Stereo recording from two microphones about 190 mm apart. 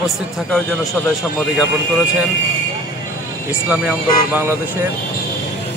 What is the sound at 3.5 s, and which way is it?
Speech, 10° right (ahead or behind).